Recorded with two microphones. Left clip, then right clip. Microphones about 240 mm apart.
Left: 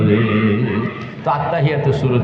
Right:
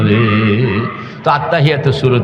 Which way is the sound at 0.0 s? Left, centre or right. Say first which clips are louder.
Right 3 dB; right.